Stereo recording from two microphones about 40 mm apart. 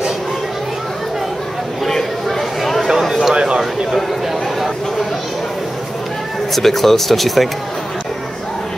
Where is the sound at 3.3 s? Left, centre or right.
Centre.